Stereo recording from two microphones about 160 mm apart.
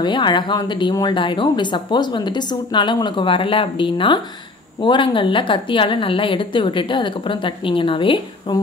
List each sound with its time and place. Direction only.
0.0 s a woman's voice: 30° left (ahead or behind)